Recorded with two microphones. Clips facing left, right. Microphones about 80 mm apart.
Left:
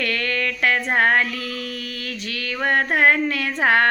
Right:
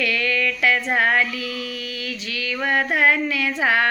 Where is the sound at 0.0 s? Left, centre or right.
Left.